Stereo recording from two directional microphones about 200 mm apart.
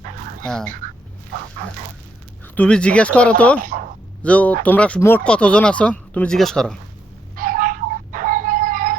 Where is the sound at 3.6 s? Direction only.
45° right (ahead or behind).